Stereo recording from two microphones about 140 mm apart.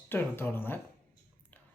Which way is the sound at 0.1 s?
15° left (ahead or behind).